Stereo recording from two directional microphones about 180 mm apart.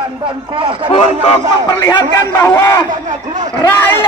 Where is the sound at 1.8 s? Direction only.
20° left (ahead or behind).